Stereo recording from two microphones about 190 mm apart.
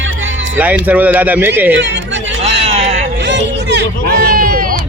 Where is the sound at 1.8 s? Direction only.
70° right (ahead or behind).